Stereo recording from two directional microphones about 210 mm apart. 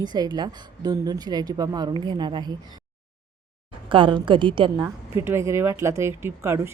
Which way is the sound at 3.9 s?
25° right (ahead or behind).